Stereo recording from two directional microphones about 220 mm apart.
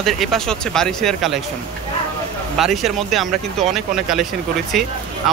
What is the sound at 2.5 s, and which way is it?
Speech, centre (ahead or behind).